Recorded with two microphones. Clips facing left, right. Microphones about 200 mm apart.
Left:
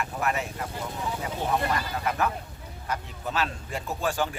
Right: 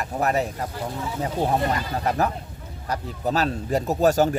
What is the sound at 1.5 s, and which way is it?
Speech, 35° right (ahead or behind).